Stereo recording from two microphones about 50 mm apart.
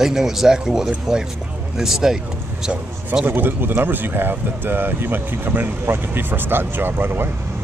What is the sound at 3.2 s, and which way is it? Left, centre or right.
Speech, right.